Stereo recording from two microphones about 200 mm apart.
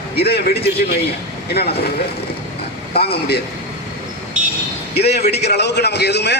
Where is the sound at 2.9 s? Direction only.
55° left (ahead or behind).